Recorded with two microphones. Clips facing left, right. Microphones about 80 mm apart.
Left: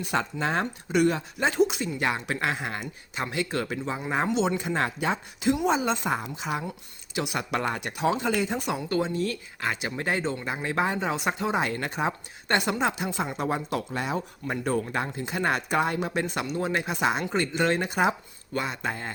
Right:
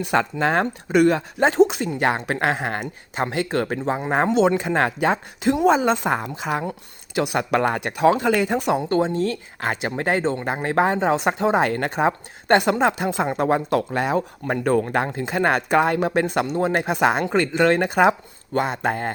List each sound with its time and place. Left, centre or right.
0.1 s speech: right
1.5 s speech: right
1.8 s speech: right
6.0 s speech: right
8.6 s speech: right
18.5 s speech: right